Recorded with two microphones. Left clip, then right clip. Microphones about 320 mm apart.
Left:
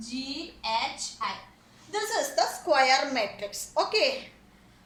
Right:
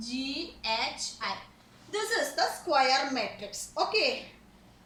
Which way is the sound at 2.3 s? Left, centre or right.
Left.